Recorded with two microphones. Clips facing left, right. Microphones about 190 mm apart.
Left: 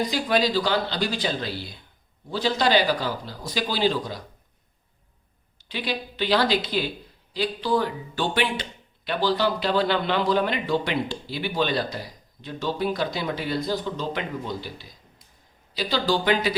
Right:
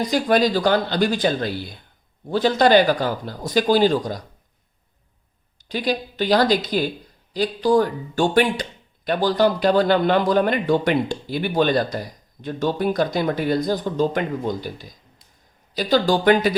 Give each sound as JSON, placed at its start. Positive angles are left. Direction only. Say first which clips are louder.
{"t": 0.0, "sound": "speech", "louder": "right 5 dB", "side_deg": -50}
{"t": 5.6, "sound": "speech", "louder": "right 6 dB", "side_deg": -45}